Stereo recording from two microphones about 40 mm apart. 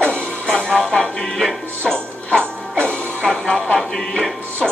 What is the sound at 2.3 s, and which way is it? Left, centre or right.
Music, right.